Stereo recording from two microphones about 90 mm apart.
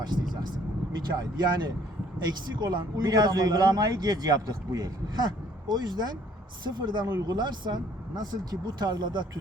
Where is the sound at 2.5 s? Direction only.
50° right (ahead or behind).